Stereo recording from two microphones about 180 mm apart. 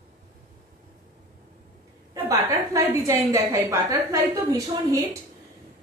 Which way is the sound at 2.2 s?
15° right (ahead or behind).